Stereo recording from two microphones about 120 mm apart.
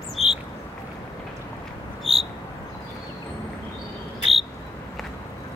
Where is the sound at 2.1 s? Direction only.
55° right (ahead or behind).